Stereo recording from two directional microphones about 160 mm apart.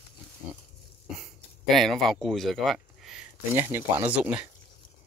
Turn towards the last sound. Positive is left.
turn(degrees=-10)  # may be behind; listen again after turning